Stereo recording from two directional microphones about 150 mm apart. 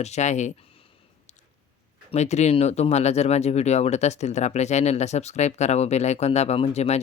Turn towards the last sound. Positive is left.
turn(degrees=45)  # may be behind; listen again after turning